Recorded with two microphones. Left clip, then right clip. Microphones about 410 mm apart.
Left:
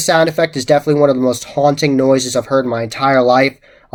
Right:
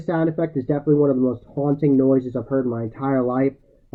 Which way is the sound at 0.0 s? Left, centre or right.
Centre.